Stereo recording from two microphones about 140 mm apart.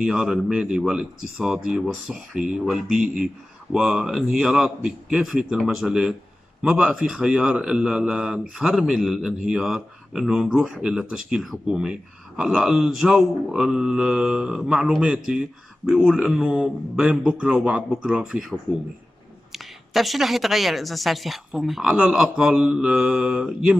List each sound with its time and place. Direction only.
0.0 s a man's voice: 5° right (ahead or behind)
19.5 s a man's voice: centre (ahead or behind)